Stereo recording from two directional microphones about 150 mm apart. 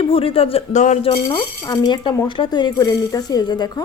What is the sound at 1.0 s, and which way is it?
Speech, 35° left (ahead or behind).